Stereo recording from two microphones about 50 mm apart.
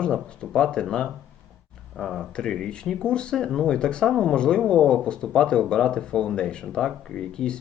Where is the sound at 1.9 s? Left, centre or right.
Centre.